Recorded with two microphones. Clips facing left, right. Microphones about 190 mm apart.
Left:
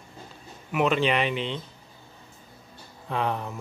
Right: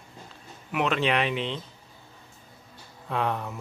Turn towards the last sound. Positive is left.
turn(degrees=0)  # may be behind; listen again after turning